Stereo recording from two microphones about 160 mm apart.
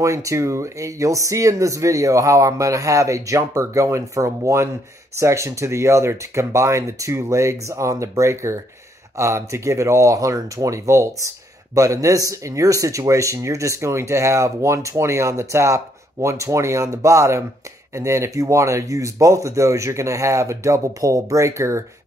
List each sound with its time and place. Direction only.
0.0 s speech: 20° right (ahead or behind)